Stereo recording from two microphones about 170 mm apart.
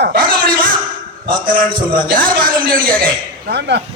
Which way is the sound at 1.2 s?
55° right (ahead or behind).